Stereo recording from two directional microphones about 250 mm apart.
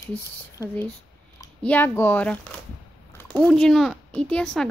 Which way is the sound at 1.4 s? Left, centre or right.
Centre.